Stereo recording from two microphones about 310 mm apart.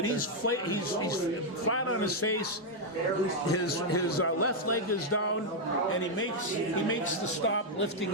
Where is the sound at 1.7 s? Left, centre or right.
Left.